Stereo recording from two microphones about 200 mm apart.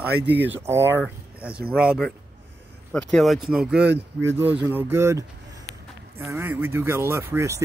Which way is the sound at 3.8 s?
60° right (ahead or behind).